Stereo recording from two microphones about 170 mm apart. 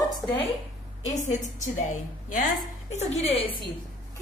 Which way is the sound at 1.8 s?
50° left (ahead or behind).